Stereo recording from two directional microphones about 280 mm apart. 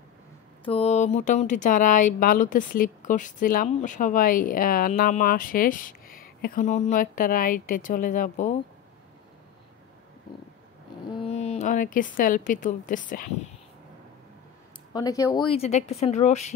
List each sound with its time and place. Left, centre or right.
0.7 s speech: left
11.2 s a woman's voice: left
14.9 s speech: centre